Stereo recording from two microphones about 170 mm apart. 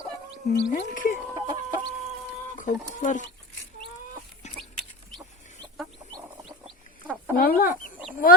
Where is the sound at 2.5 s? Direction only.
50° left (ahead or behind).